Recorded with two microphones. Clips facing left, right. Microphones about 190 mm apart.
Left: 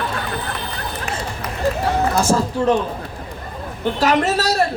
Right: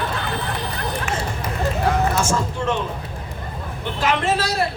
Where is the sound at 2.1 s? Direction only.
35° left (ahead or behind).